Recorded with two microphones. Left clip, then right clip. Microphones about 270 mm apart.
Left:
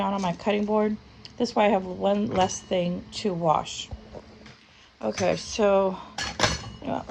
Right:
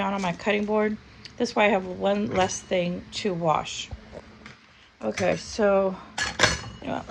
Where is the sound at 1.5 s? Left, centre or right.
Centre.